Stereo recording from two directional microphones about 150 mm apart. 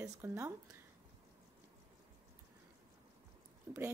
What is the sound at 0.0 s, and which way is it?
Speech, 15° right (ahead or behind).